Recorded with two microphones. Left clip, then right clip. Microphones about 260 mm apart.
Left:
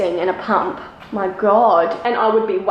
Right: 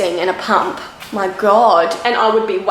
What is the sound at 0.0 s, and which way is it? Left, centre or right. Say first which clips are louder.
Speech: right 2 dB; centre.